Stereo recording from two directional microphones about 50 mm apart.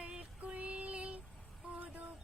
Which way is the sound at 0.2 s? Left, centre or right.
Right.